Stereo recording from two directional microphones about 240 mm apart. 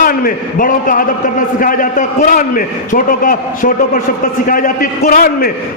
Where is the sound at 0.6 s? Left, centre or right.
Left.